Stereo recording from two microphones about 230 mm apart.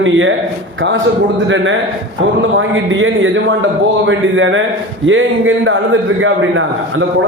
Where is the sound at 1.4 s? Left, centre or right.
Right.